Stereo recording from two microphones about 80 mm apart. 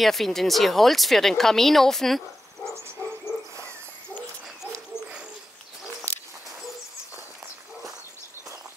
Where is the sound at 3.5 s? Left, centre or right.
Right.